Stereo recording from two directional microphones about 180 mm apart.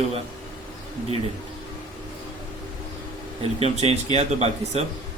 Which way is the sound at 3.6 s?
35° right (ahead or behind).